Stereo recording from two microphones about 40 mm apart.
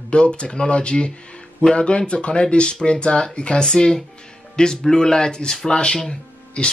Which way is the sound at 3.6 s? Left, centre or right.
Centre.